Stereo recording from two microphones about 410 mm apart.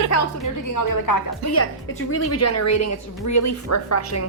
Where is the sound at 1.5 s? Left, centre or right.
Left.